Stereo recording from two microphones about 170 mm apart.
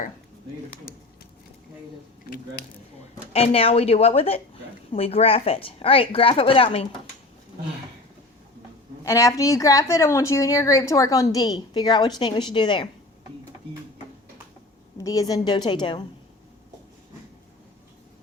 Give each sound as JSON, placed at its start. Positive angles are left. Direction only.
{"t": 3.3, "sound": "a woman's voice", "side_deg": 35}
{"t": 9.0, "sound": "a woman's voice", "side_deg": 20}
{"t": 14.9, "sound": "a woman's voice", "side_deg": 20}